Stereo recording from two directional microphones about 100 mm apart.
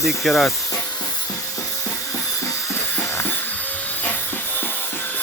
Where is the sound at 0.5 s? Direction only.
35° left (ahead or behind).